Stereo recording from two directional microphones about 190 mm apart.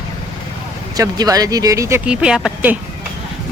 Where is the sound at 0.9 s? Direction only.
20° right (ahead or behind).